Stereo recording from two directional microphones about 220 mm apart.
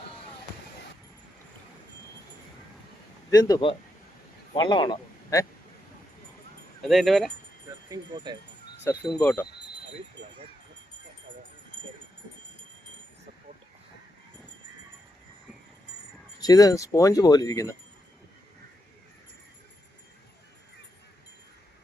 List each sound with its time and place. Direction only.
3.2 s speech: 15° left (ahead or behind)
6.8 s speech: centre (ahead or behind)
7.9 s speech: 20° right (ahead or behind)
8.8 s speech: 15° left (ahead or behind)
16.4 s speech: 15° left (ahead or behind)